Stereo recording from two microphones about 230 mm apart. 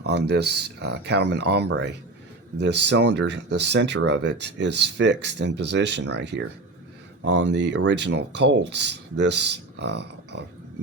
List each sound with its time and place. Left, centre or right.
0.0 s speech: right